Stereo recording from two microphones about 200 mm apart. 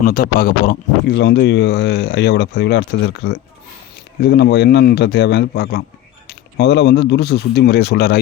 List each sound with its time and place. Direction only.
0.0 s speech: 45° left (ahead or behind)